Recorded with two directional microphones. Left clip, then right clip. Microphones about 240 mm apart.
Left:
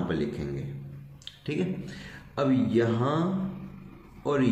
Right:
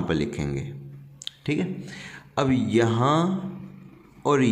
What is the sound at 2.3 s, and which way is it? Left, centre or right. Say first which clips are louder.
Speech: right 3 dB; right.